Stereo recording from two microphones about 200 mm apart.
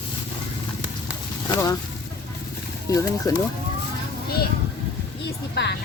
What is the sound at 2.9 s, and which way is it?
Speech, 15° left (ahead or behind).